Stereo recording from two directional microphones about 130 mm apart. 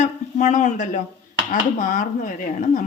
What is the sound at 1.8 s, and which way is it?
A woman's voice, 90° left.